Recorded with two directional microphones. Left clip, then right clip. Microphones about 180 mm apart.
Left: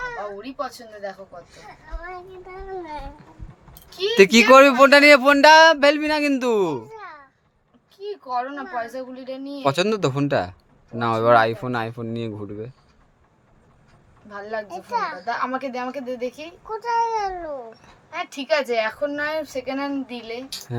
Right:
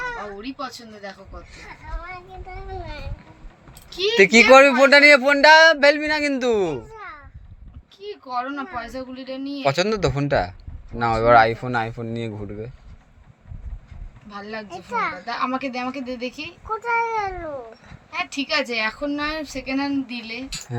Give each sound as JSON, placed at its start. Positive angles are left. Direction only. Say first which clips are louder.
{"t": 0.4, "sound": "speech", "louder": "left 1 dB", "side_deg": 25}
{"t": 2.8, "sound": "a child's voice", "louder": "left 3 dB", "side_deg": 35}
{"t": 8.0, "sound": "speech", "louder": "left 1 dB", "side_deg": 25}
{"t": 14.3, "sound": "speech", "louder": "left 3 dB", "side_deg": 25}
{"t": 14.7, "sound": "speech", "louder": "right 3 dB", "side_deg": 10}
{"t": 15.3, "sound": "speech", "louder": "even", "side_deg": 25}
{"t": 16.6, "sound": "speech", "louder": "even", "side_deg": 10}
{"t": 18.1, "sound": "speech", "louder": "left 1 dB", "side_deg": 30}